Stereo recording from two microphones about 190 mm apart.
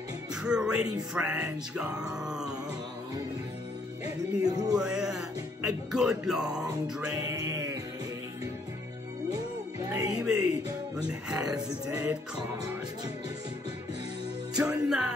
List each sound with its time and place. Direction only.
0.3 s speech: 5° right (ahead or behind)
1.1 s music: 5° right (ahead or behind)
4.0 s music: 20° right (ahead or behind)
4.7 s music: 5° right (ahead or behind)
7.2 s music: 15° right (ahead or behind)
9.8 s speech: 20° right (ahead or behind)
10.2 s music: 5° right (ahead or behind)
14.6 s music: 5° right (ahead or behind)